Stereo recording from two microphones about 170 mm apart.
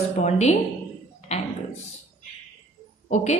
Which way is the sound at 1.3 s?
40° left (ahead or behind).